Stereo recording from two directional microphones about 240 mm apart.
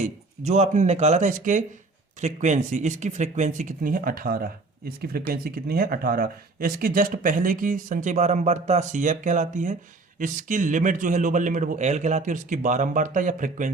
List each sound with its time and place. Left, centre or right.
0.0 s speech: right